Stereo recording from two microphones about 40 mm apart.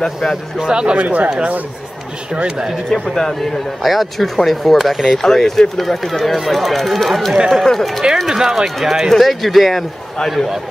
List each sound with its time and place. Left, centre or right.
0.6 s speech: right
1.0 s speech: right
2.3 s speech: right
2.9 s speech: centre
5.2 s speech: centre
7.3 s speech: centre
7.6 s speech: centre
8.3 s speech: centre